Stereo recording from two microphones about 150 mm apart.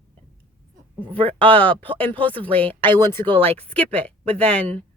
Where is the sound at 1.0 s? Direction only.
35° right (ahead or behind).